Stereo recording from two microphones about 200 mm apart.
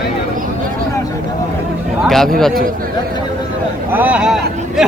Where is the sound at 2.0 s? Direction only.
Centre (ahead or behind).